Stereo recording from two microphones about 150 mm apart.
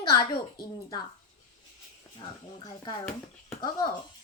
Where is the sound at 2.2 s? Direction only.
30° left (ahead or behind).